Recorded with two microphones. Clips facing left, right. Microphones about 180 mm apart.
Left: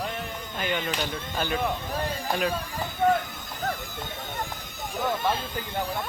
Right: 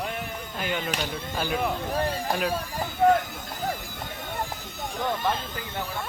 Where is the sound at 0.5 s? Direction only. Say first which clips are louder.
Left 1 dB; 5° right (ahead or behind).